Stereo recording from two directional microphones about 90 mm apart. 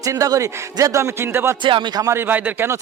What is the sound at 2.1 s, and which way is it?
Speech, 20° right (ahead or behind).